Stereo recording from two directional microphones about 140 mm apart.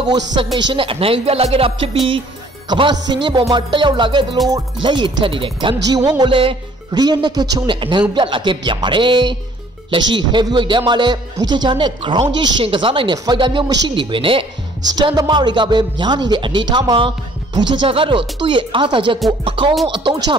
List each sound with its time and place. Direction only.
0.0 s speech: 35° right (ahead or behind)
2.7 s speech: 30° right (ahead or behind)
14.8 s speech: 30° right (ahead or behind)